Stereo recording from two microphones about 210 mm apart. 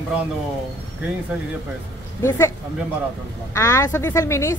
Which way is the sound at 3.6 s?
15° left (ahead or behind).